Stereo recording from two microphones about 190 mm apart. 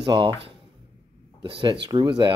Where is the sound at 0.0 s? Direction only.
25° right (ahead or behind).